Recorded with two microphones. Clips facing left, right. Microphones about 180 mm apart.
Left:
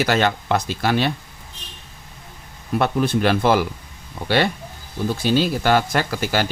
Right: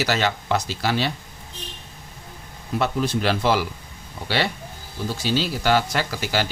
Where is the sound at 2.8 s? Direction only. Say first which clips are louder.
Left 4 dB; 55° left (ahead or behind).